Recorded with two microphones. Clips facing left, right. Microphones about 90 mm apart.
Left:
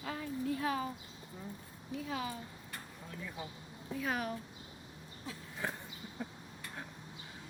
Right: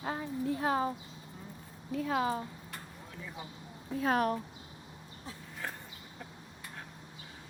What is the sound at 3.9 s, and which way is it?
Speech, 45° right (ahead or behind).